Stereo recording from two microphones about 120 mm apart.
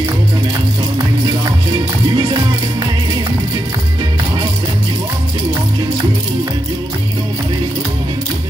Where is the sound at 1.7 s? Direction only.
35° right (ahead or behind).